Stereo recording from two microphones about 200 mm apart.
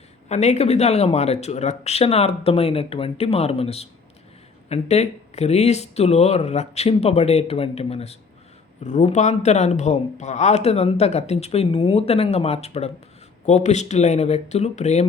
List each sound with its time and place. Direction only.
0.3 s speech: 35° left (ahead or behind)